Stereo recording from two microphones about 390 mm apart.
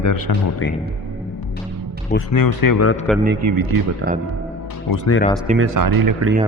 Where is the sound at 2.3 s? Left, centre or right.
Left.